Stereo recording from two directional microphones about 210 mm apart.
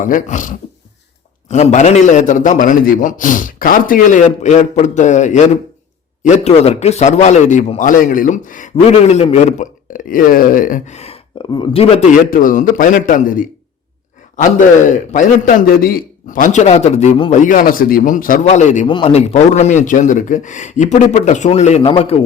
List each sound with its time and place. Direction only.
0.0 s a man's voice: 40° left (ahead or behind)
12.3 s a man's voice: 40° left (ahead or behind)
14.8 s a man's voice: 35° left (ahead or behind)